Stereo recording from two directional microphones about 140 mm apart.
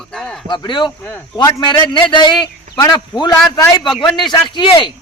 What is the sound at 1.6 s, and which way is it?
A man's voice, 35° left (ahead or behind).